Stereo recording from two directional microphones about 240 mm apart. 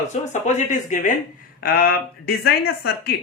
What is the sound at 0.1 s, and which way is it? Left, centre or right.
Speech, left.